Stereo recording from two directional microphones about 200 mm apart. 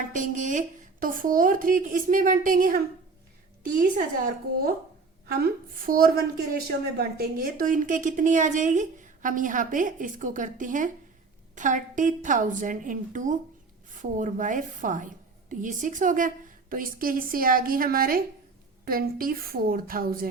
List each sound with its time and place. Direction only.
0.1 s a woman's voice: 40° right (ahead or behind)